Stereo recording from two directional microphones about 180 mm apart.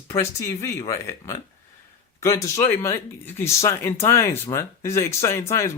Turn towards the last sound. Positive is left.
turn(degrees=15)  # may be behind; listen again after turning